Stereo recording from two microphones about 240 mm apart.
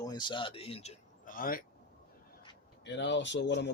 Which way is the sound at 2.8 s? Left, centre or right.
Left.